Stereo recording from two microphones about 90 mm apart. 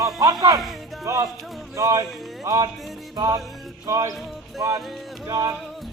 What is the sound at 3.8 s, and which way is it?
Speech, 35° right (ahead or behind).